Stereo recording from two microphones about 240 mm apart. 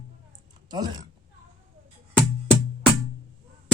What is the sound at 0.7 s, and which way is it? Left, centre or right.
Speech, centre.